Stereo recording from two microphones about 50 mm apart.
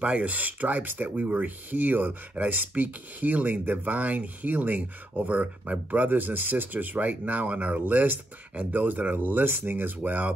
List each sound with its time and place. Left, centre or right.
0.0 s speech: right